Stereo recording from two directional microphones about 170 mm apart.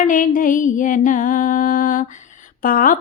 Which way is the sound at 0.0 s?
50° left (ahead or behind).